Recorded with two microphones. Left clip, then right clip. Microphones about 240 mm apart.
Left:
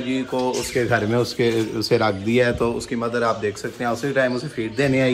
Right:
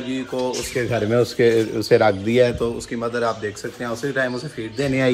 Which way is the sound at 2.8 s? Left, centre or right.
Centre.